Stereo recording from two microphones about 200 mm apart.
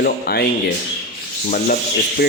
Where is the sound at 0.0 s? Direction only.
50° left (ahead or behind).